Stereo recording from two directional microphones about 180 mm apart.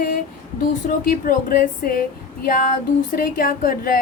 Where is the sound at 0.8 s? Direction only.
50° left (ahead or behind).